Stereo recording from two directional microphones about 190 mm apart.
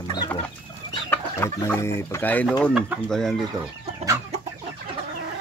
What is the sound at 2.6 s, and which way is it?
Speech, centre (ahead or behind).